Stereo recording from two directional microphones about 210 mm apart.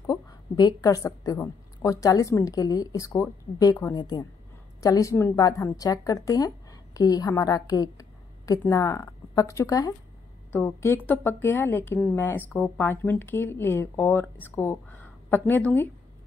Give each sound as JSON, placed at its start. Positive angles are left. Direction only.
{"t": 0.0, "sound": "a woman's voice", "side_deg": 15}